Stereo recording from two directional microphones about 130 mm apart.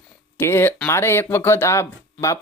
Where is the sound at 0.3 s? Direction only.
20° left (ahead or behind).